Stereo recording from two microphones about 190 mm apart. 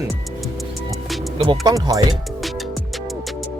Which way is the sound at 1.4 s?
15° right (ahead or behind).